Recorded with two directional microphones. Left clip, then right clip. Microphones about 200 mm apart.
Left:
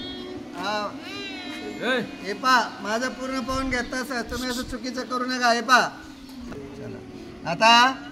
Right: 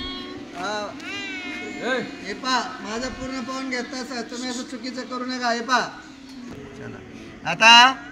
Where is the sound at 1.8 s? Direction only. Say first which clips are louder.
Left 1 dB; 45° left (ahead or behind).